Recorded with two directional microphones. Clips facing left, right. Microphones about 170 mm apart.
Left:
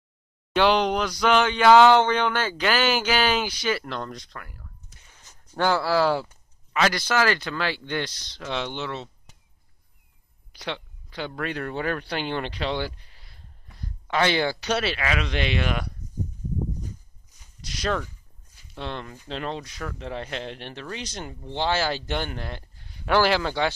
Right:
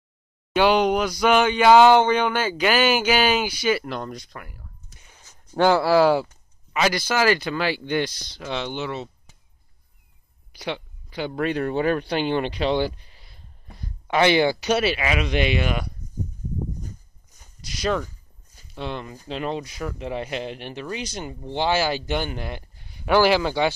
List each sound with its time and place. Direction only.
0.6 s speech: 10° right (ahead or behind)
10.5 s a sound: 10° right (ahead or behind)
11.3 s speech: 20° right (ahead or behind); by 15.9 s 5° right (ahead or behind)
16.8 s walk: 45° right (ahead or behind)
17.6 s speech: 5° right (ahead or behind)
18.0 s a sound: 40° right (ahead or behind)
18.8 s speech: 5° right (ahead or behind)